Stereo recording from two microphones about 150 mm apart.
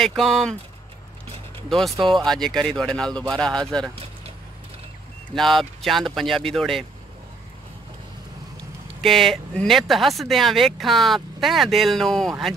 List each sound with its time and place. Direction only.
0.0 s speech: centre (ahead or behind)
1.7 s speech: centre (ahead or behind)
3.9 s vehicle: 40° right (ahead or behind)
5.3 s speech: centre (ahead or behind)
9.0 s speech: centre (ahead or behind)